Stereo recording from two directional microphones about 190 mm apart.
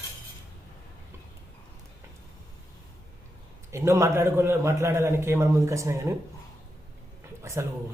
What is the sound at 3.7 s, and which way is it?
A man's voice, 15° right (ahead or behind).